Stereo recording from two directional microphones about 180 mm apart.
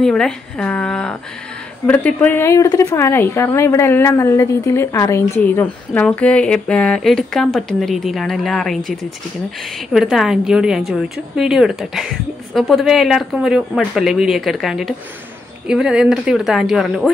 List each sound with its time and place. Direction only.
0.0 s a woman's voice: 5° left (ahead or behind)
9.9 s speech: 5° right (ahead or behind)